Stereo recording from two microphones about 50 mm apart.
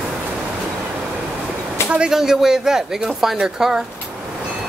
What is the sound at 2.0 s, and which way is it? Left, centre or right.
Speech, centre.